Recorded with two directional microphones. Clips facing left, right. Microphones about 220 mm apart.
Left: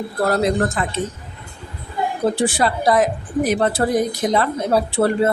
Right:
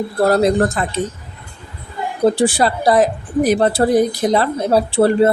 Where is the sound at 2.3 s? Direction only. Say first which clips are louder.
Right 3 dB; 35° right (ahead or behind).